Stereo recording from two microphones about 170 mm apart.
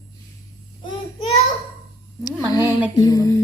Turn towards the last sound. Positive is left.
turn(degrees=20)  # may be behind; listen again after turning